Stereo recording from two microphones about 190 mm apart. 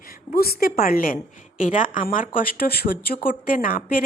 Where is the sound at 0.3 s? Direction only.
50° left (ahead or behind).